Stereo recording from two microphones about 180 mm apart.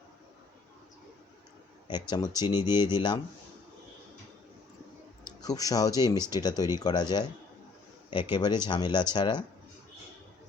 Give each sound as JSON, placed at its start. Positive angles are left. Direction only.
{"t": 1.9, "sound": "speech", "side_deg": 25}
{"t": 5.2, "sound": "speech", "side_deg": 20}